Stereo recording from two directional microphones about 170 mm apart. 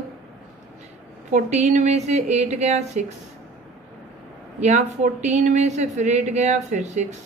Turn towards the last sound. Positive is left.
turn(degrees=-45)  # may be behind; listen again after turning